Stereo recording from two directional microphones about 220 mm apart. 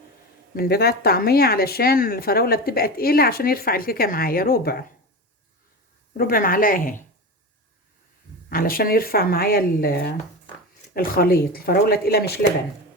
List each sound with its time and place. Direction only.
0.5 s speech: 45° left (ahead or behind)
6.1 s speech: 40° left (ahead or behind)
8.4 s speech: 40° left (ahead or behind)